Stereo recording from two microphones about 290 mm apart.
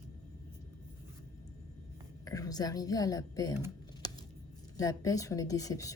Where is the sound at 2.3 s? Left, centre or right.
Centre.